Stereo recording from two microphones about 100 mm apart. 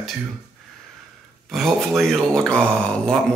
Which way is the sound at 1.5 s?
Centre (ahead or behind).